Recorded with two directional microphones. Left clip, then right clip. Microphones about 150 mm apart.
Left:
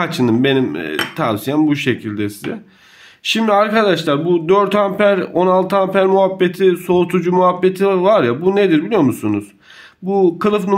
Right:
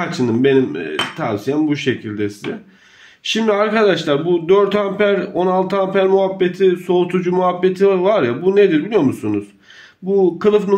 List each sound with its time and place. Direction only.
0.0 s a man's voice: 35° left (ahead or behind)